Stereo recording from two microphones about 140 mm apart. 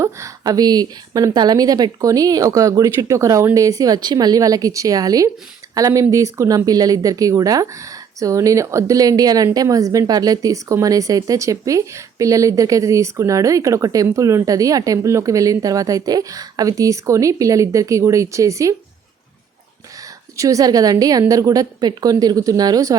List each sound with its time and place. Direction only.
0.0 s speech: 25° right (ahead or behind)
20.3 s speech: 25° right (ahead or behind)